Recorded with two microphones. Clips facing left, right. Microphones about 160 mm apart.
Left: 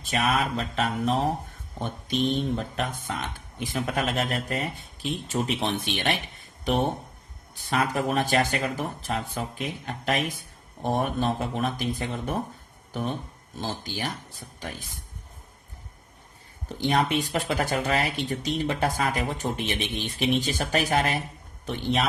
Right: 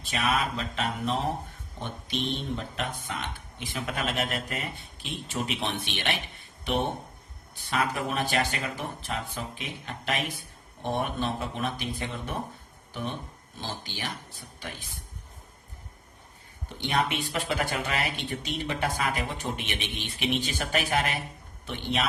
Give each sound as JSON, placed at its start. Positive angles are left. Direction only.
{"t": 0.0, "sound": "speech", "side_deg": 40}
{"t": 7.7, "sound": "speech", "side_deg": 40}
{"t": 16.6, "sound": "speech", "side_deg": 40}